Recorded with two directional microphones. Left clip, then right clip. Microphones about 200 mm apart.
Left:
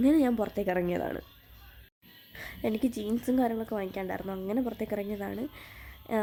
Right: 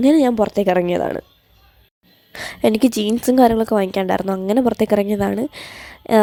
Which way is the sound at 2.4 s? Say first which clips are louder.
Right 15 dB; 40° right (ahead or behind).